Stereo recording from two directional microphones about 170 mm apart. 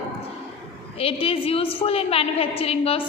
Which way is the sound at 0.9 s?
35° left (ahead or behind).